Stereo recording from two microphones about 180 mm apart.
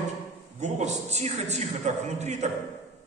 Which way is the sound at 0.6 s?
40° right (ahead or behind).